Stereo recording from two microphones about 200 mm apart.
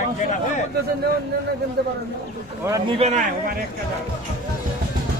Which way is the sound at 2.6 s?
15° right (ahead or behind).